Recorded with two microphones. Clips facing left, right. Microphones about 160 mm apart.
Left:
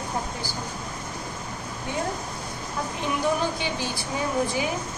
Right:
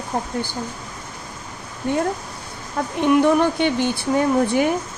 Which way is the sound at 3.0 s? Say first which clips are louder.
Right 10 dB; 60° right (ahead or behind).